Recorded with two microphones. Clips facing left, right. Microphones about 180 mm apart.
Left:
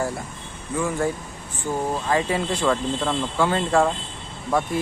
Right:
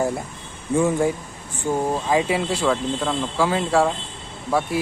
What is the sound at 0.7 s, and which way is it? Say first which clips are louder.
Speech: right 5 dB; 25° right (ahead or behind).